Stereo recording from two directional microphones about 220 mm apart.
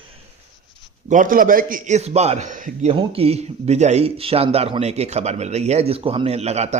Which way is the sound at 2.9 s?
25° right (ahead or behind).